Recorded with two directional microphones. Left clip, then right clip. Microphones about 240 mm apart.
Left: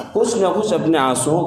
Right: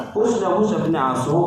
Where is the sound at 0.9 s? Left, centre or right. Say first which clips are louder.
Left 4 dB; left.